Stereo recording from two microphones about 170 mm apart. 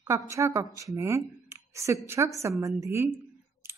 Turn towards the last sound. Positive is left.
turn(degrees=-15)  # may be behind; listen again after turning